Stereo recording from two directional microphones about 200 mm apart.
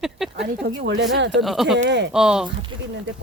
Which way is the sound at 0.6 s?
60° right (ahead or behind).